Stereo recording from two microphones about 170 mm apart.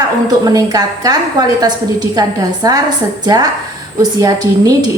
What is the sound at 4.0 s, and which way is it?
Speech, 20° right (ahead or behind).